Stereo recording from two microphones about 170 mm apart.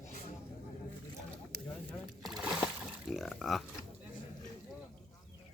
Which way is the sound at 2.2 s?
Centre (ahead or behind).